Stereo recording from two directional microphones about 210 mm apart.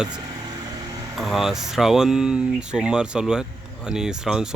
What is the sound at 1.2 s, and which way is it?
Speech, centre (ahead or behind).